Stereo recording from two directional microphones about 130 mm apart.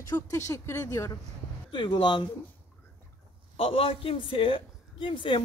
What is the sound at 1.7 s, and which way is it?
Speech, 35° left (ahead or behind).